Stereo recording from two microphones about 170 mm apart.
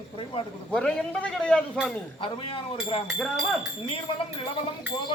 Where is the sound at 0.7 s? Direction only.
5° left (ahead or behind).